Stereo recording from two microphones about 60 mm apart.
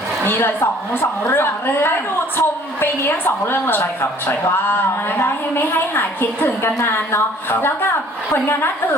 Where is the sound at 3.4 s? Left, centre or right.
Left.